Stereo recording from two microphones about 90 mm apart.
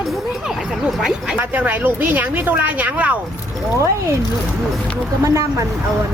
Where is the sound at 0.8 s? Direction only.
10° right (ahead or behind).